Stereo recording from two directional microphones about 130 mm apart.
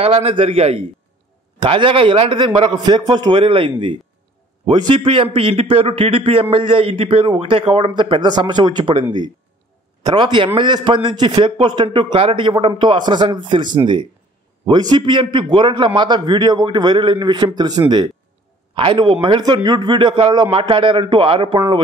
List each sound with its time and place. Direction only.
0.0 s a man's voice: 45° right (ahead or behind)
10.0 s a man's voice: 35° right (ahead or behind)
14.7 s a man's voice: 35° right (ahead or behind)